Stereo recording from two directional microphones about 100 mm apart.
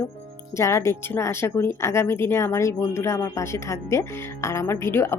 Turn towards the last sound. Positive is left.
turn(degrees=25)  # may be behind; listen again after turning